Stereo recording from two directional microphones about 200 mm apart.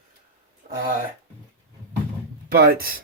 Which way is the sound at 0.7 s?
35° right (ahead or behind).